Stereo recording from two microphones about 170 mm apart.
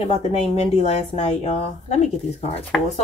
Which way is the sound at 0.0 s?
35° left (ahead or behind).